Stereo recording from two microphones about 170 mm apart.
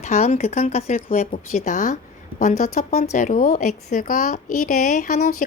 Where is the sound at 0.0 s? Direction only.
45° left (ahead or behind).